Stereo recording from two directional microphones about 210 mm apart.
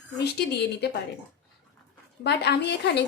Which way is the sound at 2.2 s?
55° left (ahead or behind).